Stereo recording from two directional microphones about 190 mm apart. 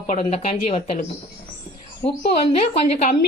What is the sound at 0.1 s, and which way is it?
Speech, 35° left (ahead or behind).